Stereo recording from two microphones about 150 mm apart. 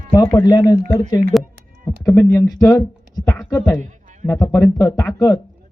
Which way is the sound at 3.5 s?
20° left (ahead or behind).